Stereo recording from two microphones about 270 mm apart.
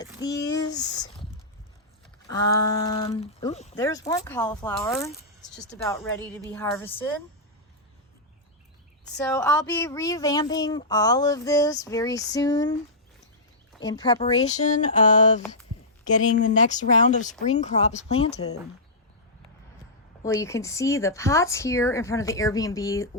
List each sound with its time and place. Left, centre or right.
0.2 s speech: centre
2.8 s speech: centre
3.8 s speech: centre
9.1 s speech: centre
13.8 s speech: centre
20.2 s speech: centre